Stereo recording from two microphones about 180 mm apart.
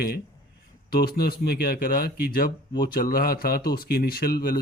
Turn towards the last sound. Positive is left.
turn(degrees=55)  # may be behind; listen again after turning